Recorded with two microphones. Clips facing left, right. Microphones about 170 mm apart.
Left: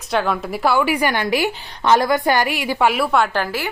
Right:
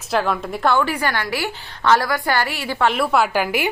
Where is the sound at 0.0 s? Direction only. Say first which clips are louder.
Even; centre (ahead or behind).